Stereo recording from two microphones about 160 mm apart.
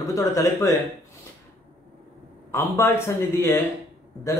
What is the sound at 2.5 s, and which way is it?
Speech, 15° left (ahead or behind).